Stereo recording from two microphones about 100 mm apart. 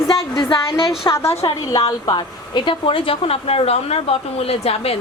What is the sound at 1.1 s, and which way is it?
A woman's voice, 30° left (ahead or behind).